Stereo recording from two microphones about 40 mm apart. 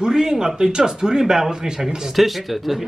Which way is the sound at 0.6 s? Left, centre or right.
Centre.